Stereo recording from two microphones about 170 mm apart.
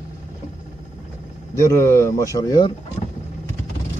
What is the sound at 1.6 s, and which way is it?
Speech, 15° left (ahead or behind).